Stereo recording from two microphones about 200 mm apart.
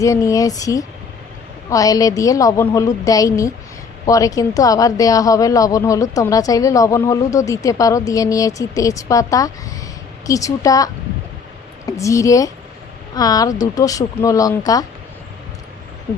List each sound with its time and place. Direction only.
0.0 s a woman's voice: 15° left (ahead or behind)